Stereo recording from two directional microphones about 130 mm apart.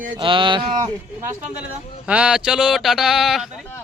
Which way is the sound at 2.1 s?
5° right (ahead or behind).